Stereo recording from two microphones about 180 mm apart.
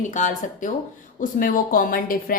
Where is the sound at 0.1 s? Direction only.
45° left (ahead or behind).